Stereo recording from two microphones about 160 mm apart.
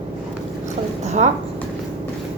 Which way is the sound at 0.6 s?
45° right (ahead or behind).